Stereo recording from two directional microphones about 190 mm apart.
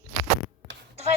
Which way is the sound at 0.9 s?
35° right (ahead or behind).